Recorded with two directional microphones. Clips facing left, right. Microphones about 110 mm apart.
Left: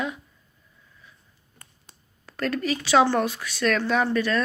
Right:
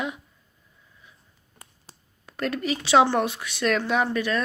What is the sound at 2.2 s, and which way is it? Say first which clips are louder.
Speech: left 1 dB; 15° right (ahead or behind).